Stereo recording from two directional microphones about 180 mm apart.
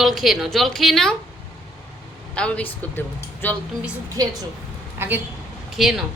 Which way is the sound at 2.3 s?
5° left (ahead or behind).